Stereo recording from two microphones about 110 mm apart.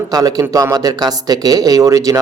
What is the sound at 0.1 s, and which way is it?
Speech, 35° right (ahead or behind).